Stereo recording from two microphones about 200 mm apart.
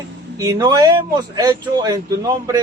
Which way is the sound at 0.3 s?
20° right (ahead or behind).